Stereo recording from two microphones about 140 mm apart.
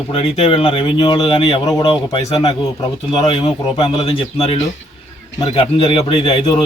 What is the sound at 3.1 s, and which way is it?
Speech, 40° left (ahead or behind).